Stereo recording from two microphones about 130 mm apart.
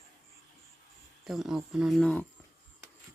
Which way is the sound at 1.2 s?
Centre (ahead or behind).